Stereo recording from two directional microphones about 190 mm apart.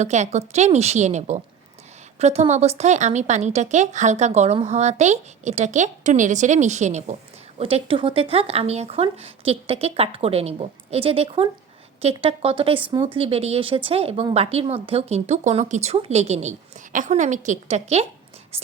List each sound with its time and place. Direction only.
0.0 s speech: 35° right (ahead or behind)